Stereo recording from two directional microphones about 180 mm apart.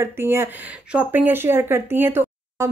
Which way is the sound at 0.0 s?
15° right (ahead or behind).